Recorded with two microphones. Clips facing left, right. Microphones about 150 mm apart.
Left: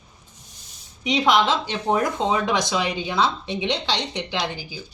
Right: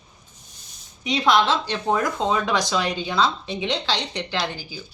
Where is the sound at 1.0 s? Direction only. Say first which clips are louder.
Even; 20° left (ahead or behind).